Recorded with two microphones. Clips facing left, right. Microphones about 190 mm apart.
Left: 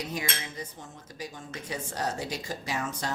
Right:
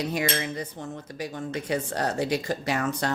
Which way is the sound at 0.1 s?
65° right (ahead or behind).